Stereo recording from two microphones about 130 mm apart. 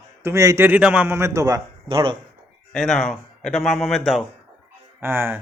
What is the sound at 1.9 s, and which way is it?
Speech, 40° right (ahead or behind).